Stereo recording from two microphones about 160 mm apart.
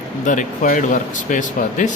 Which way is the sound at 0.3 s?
55° left (ahead or behind).